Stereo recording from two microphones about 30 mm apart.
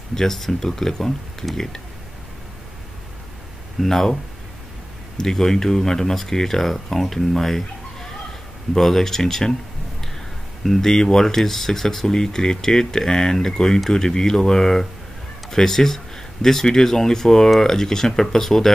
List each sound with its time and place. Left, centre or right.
0.1 s speech: centre
3.8 s speech: centre
5.2 s speech: centre
10.6 s speech: centre